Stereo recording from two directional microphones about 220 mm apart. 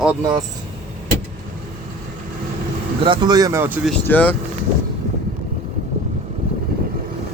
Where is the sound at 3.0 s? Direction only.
20° right (ahead or behind).